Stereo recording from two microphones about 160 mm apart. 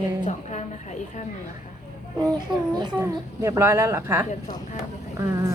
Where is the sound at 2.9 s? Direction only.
20° right (ahead or behind).